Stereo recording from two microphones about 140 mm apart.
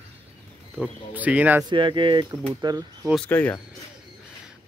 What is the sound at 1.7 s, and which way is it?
Speech, 35° right (ahead or behind).